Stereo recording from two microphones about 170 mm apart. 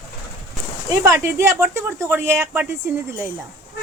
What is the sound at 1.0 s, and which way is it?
Speech, 20° right (ahead or behind).